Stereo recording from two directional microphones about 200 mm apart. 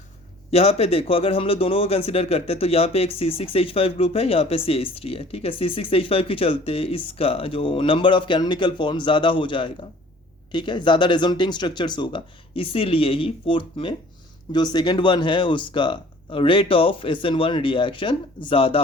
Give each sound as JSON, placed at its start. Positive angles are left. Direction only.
{"t": 0.5, "sound": "a man's voice", "side_deg": 30}